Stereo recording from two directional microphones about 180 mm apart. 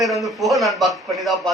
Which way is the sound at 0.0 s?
Centre (ahead or behind).